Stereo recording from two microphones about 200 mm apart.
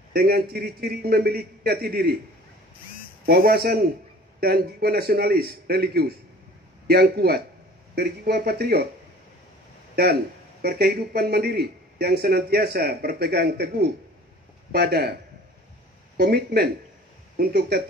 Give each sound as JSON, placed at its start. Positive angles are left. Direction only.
{"t": 0.1, "sound": "speech", "side_deg": -50}
{"t": 3.3, "sound": "speech", "side_deg": -50}
{"t": 10.6, "sound": "speech", "side_deg": -50}
{"t": 16.2, "sound": "speech", "side_deg": -50}